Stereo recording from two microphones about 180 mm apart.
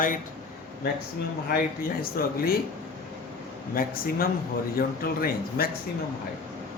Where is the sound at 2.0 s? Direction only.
55° left (ahead or behind).